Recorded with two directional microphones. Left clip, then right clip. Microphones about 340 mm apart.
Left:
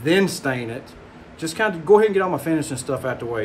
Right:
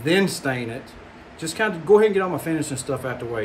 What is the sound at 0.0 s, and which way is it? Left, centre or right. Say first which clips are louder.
Speech: left 1 dB; centre.